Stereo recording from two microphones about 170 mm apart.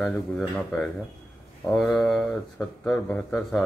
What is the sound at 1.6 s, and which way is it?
Speech, centre (ahead or behind).